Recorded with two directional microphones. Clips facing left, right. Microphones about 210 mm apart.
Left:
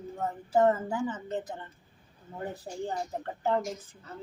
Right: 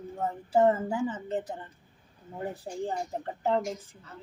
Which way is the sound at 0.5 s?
10° right (ahead or behind).